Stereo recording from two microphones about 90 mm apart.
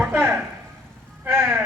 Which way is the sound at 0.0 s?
20° right (ahead or behind).